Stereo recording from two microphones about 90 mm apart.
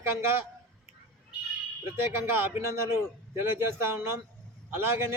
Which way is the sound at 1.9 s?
30° right (ahead or behind).